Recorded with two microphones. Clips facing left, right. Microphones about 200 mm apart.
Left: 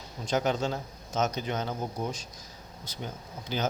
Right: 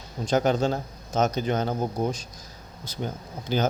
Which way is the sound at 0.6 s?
35° right (ahead or behind).